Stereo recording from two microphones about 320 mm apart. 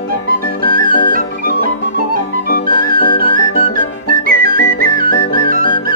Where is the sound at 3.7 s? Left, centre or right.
Right.